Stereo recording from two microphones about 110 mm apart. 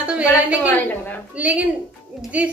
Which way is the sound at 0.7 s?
15° left (ahead or behind).